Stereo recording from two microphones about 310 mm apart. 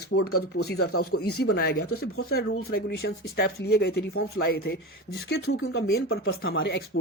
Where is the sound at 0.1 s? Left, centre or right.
Left.